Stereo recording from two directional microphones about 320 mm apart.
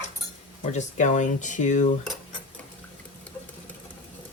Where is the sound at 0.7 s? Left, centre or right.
Left.